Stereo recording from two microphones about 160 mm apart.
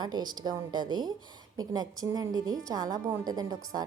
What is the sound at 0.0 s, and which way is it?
A woman's voice, 25° right (ahead or behind).